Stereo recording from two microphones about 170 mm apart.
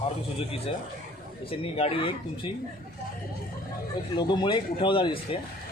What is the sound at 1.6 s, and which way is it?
Speech, 35° left (ahead or behind).